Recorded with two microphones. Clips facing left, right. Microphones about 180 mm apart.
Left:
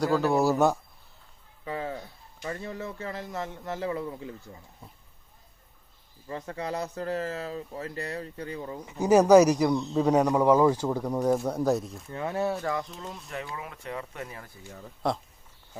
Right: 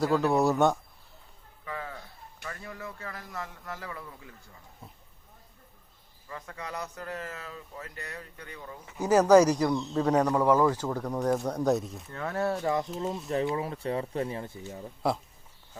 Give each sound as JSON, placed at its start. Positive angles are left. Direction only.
{"t": 0.0, "sound": "speech", "side_deg": 0}
{"t": 1.6, "sound": "a sound", "side_deg": 25}
{"t": 2.4, "sound": "speech", "side_deg": 25}
{"t": 6.2, "sound": "speech", "side_deg": 30}
{"t": 8.9, "sound": "a man's voice", "side_deg": 10}
{"t": 12.1, "sound": "a man's voice", "side_deg": 15}
{"t": 12.6, "sound": "speech", "side_deg": -25}
{"t": 15.0, "sound": "speech", "side_deg": -5}